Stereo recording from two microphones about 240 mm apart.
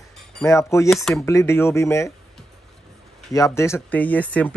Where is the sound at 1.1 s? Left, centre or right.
Centre.